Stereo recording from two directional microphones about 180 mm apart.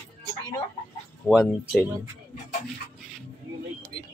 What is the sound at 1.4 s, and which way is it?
Speech, centre (ahead or behind).